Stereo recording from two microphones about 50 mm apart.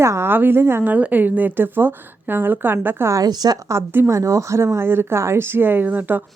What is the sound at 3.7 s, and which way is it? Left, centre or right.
Speech, right.